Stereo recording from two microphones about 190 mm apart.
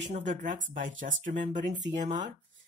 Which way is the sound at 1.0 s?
40° right (ahead or behind).